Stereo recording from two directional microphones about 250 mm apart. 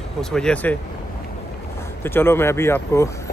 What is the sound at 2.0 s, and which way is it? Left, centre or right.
Speech, centre.